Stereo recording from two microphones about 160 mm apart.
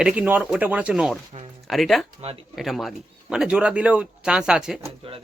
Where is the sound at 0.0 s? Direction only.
10° right (ahead or behind).